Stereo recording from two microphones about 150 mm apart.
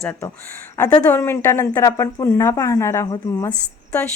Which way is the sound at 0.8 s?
10° left (ahead or behind).